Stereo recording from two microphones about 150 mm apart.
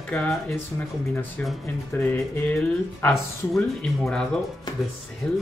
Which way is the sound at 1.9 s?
15° left (ahead or behind).